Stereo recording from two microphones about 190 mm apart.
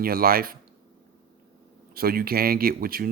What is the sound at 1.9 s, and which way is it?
Speech, 50° right (ahead or behind).